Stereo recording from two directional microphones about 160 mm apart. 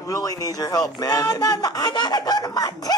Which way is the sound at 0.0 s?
20° left (ahead or behind).